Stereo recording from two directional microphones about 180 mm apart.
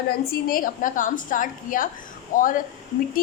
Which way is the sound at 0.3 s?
55° left (ahead or behind).